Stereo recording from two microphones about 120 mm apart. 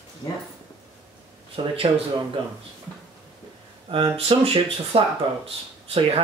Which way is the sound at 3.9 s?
50° right (ahead or behind).